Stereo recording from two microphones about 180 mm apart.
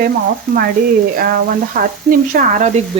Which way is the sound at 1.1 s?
50° right (ahead or behind).